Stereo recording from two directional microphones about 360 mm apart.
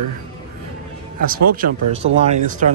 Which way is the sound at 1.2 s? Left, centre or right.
Right.